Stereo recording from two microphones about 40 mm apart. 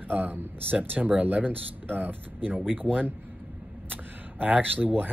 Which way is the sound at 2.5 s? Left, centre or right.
Right.